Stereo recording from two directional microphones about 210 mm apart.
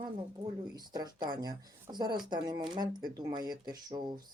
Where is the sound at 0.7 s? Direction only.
20° right (ahead or behind).